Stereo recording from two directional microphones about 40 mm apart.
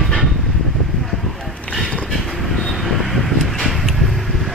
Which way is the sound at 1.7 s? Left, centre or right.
Left.